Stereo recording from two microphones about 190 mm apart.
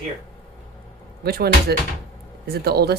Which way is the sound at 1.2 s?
55° right (ahead or behind).